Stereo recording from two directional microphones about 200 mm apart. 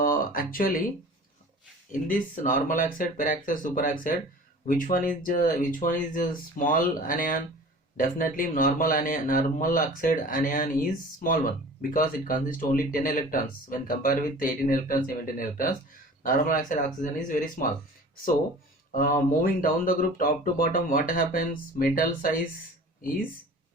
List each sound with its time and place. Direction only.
0.0 s speech: 45° left (ahead or behind)
1.9 s speech: 40° left (ahead or behind)
18.9 s speech: 45° left (ahead or behind)